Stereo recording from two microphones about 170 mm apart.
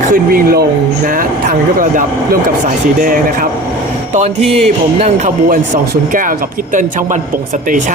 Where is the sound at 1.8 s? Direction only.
50° right (ahead or behind).